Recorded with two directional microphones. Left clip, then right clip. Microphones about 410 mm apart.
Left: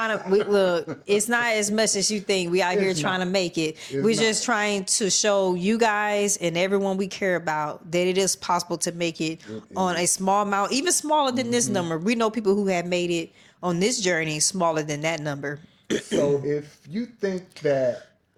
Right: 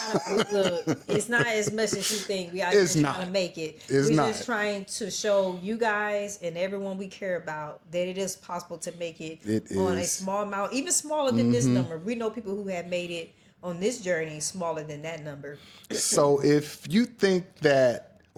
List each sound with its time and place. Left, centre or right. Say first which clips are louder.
0.5 s speech: left 4 dB; left
16.4 s speech: right 4 dB; right